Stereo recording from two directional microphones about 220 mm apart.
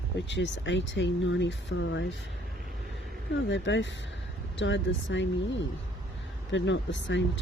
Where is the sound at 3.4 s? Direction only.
55° left (ahead or behind).